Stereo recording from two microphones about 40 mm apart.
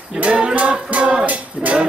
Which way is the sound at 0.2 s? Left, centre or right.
Right.